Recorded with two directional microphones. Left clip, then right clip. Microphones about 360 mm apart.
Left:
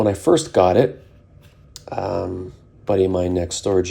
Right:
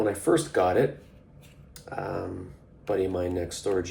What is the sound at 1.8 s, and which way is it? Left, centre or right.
Speech, centre.